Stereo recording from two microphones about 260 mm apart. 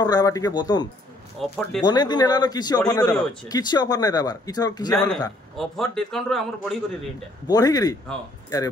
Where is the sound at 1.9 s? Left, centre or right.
Centre.